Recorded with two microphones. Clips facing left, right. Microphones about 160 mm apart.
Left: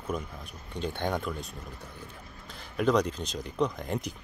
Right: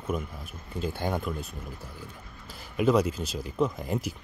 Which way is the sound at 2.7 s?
5° right (ahead or behind).